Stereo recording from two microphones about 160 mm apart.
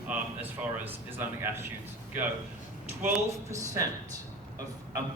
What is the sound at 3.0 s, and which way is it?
Speech, 20° right (ahead or behind).